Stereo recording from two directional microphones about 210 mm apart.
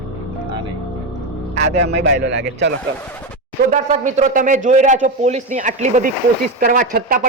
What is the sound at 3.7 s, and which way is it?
Speech, 35° right (ahead or behind).